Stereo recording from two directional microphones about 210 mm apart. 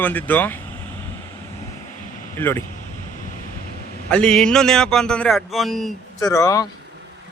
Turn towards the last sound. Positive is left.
turn(degrees=15)  # may be behind; listen again after turning